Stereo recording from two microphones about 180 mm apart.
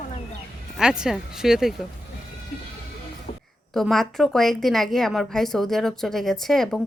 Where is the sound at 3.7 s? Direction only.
Centre (ahead or behind).